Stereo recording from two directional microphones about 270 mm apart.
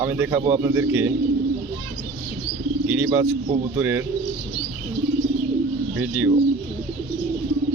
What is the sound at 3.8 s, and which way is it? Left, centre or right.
Speech, centre.